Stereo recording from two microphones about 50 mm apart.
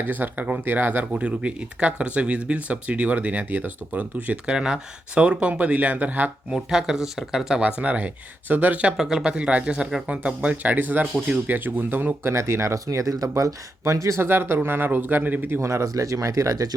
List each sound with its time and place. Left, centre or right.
0.0 s speech: right
4.4 s speech: centre; by 6.3 s right
6.5 s speech: centre
7.8 s speech: right
9.0 s speech: centre; by 12.1 s right
12.2 s speech: right
14.2 s speech: right
15.6 s speech: right